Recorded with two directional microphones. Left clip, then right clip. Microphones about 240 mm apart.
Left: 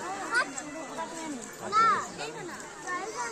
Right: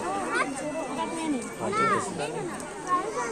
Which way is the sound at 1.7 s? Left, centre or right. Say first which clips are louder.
Left 2 dB; left.